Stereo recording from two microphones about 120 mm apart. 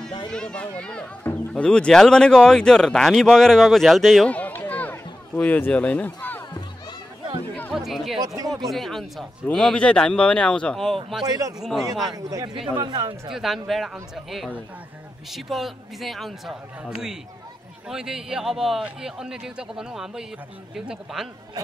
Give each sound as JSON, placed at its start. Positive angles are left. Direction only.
{"t": 0.3, "sound": "speech", "side_deg": 5}
{"t": 7.7, "sound": "chatter", "side_deg": 0}
{"t": 8.5, "sound": "speech", "side_deg": 0}
{"t": 11.2, "sound": "speech", "side_deg": -30}
{"t": 13.3, "sound": "speech", "side_deg": 0}